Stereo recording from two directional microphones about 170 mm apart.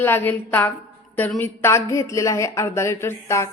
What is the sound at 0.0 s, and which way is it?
Speech, 15° left (ahead or behind).